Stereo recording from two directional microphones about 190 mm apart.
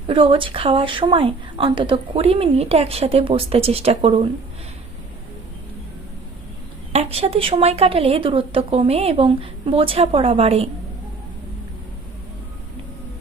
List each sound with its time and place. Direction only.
0.1 s a woman's voice: 25° right (ahead or behind)
6.9 s a woman's voice: 30° right (ahead or behind)